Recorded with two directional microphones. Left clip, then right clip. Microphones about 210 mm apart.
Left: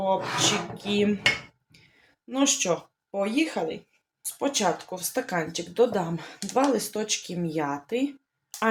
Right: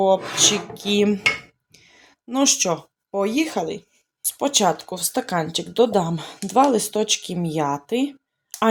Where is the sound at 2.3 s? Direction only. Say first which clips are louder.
Right 5 dB; 40° right (ahead or behind).